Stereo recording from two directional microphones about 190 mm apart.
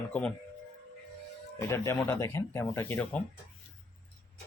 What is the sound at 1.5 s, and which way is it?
Speech, 15° left (ahead or behind).